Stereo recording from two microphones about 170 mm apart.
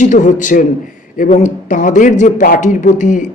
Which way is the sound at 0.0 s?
45° left (ahead or behind).